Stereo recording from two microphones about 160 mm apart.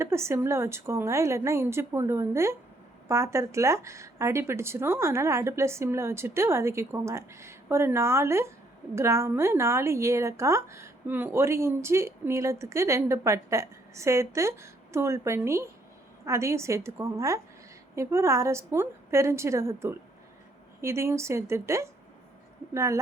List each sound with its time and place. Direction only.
0.0 s a woman's voice: 15° right (ahead or behind)